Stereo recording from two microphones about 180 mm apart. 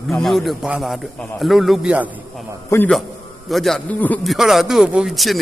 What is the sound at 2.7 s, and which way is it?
Speech, 10° left (ahead or behind).